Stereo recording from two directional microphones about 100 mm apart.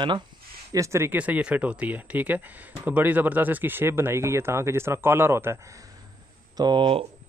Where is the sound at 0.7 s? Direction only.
30° right (ahead or behind).